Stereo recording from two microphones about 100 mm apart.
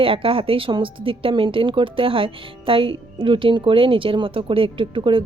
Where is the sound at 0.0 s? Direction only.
65° right (ahead or behind).